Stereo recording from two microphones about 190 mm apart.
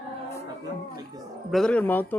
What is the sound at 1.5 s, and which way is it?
Speech, 5° left (ahead or behind).